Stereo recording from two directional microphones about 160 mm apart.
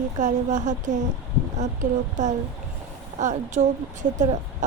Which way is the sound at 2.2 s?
50° right (ahead or behind).